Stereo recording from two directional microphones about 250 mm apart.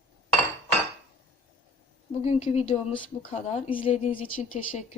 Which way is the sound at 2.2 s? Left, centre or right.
Left.